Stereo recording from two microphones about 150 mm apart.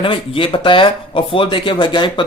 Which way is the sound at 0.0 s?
35° left (ahead or behind).